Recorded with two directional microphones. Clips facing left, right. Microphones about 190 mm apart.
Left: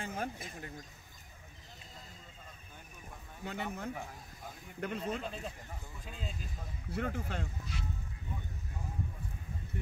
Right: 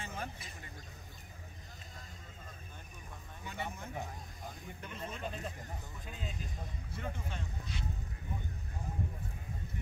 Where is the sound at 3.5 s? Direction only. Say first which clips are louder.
Left 4 dB; 65° left (ahead or behind).